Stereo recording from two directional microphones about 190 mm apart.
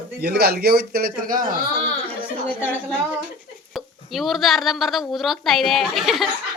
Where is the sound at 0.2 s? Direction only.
55° right (ahead or behind).